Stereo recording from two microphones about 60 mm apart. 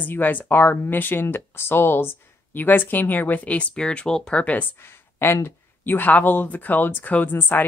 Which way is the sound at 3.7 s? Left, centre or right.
Centre.